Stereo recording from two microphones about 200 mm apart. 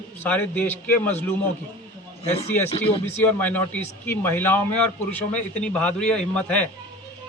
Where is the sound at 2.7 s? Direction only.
30° left (ahead or behind).